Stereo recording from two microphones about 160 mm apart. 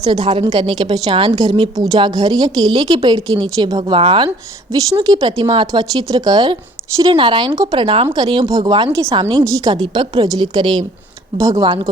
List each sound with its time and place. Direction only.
0.1 s a woman's voice: 35° right (ahead or behind)
9.4 s speech: 20° right (ahead or behind)
9.7 s speech: 30° right (ahead or behind)